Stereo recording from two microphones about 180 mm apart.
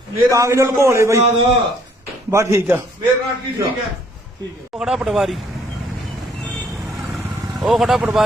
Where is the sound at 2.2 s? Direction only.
15° right (ahead or behind).